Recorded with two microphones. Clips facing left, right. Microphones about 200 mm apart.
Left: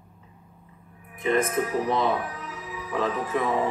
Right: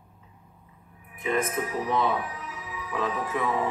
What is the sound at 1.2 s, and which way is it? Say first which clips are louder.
Speech: left 4 dB; 35° left (ahead or behind).